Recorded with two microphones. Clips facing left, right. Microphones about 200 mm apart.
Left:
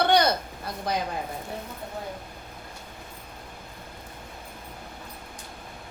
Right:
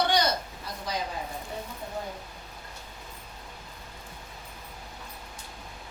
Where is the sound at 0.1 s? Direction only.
55° left (ahead or behind).